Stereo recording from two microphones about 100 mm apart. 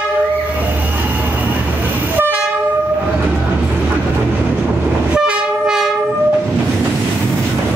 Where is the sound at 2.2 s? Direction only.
20° right (ahead or behind).